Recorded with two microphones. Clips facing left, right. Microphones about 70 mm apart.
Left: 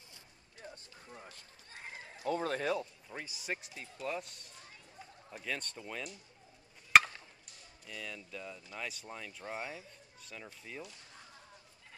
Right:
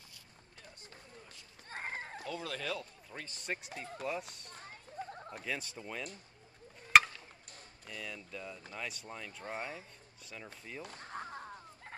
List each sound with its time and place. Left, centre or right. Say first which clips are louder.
1.1 s run: left 4 dB; left
1.7 s a sound: right 7 dB; right
2.2 s speech: left 8 dB; left
3.1 s speech: left 1 dB; centre
3.7 s speech: right 5 dB; right
4.0 s speech: left 1 dB; centre
4.6 s a sound: right 10 dB; right
5.4 s speech: left 1 dB; centre
6.9 s a sound: even; centre
7.9 s speech: even; centre
10.8 s fowl: right 6 dB; right